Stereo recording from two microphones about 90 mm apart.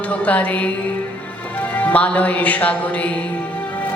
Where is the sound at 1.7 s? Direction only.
15° left (ahead or behind).